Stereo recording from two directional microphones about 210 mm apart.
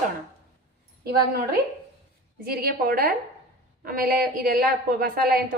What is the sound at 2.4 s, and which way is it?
A woman's voice, 45° right (ahead or behind).